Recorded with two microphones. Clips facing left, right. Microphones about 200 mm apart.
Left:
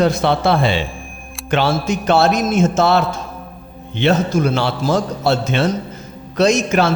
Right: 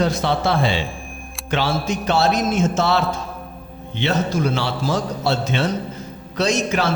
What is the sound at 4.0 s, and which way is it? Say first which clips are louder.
Speech: left 5 dB; 55° left (ahead or behind).